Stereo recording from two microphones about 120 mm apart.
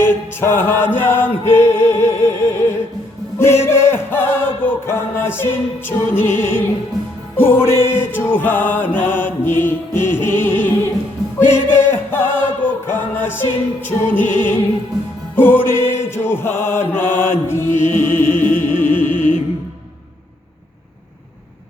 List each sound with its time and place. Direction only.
0.0 s music: 20° left (ahead or behind)